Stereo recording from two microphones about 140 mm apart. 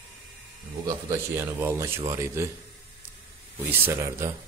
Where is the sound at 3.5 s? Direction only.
15° right (ahead or behind).